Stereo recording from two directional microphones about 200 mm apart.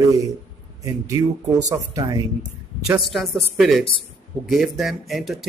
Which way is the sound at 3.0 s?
Centre (ahead or behind).